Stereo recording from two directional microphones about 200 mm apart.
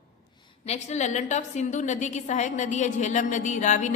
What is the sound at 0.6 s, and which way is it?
A woman's voice, 35° left (ahead or behind).